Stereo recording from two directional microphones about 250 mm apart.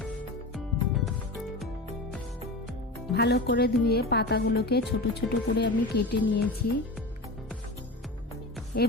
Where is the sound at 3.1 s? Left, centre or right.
Left.